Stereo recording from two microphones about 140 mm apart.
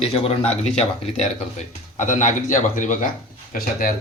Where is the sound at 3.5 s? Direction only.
85° left.